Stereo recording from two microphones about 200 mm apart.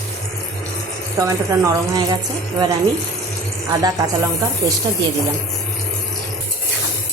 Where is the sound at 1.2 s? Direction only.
15° right (ahead or behind).